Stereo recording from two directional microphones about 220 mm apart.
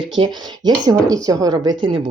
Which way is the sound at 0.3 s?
20° right (ahead or behind).